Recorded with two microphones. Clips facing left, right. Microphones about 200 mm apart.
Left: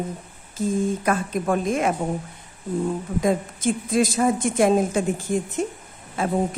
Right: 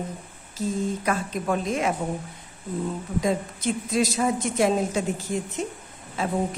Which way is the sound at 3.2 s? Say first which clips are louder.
Left 3 dB; 50° left (ahead or behind).